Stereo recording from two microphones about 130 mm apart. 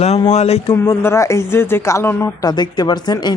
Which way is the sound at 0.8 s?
20° left (ahead or behind).